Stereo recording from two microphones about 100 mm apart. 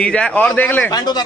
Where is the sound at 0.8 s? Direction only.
40° left (ahead or behind).